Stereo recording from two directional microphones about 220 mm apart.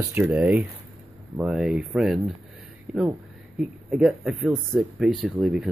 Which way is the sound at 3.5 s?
5° right (ahead or behind).